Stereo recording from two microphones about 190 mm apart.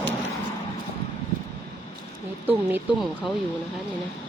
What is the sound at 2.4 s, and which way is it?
Speech, 10° right (ahead or behind).